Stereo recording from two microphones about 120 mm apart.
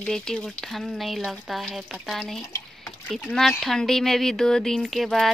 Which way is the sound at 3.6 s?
Centre (ahead or behind).